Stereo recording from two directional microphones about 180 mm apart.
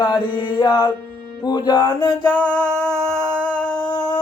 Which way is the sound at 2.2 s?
10° left (ahead or behind).